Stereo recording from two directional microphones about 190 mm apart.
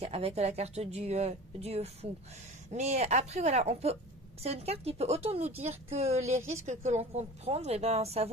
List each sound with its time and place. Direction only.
0.0 s a woman's voice: 35° right (ahead or behind)